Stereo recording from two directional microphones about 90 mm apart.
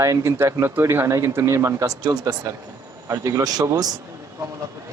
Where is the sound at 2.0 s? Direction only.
45° right (ahead or behind).